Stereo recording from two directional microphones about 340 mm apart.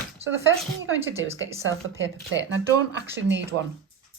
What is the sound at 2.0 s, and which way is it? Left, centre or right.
Speech, right.